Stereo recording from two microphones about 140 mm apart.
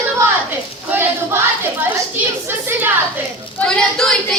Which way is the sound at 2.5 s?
15° right (ahead or behind).